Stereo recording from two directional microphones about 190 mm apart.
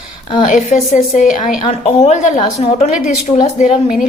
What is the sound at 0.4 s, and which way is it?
A woman's voice, 40° left (ahead or behind).